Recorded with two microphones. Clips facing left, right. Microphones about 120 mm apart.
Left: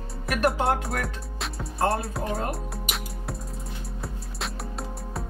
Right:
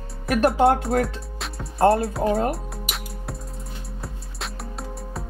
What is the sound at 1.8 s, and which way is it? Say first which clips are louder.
Speech: right 8 dB; 30° right (ahead or behind).